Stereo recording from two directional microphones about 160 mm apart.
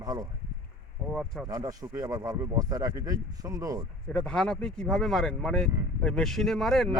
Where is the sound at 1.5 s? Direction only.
20° right (ahead or behind).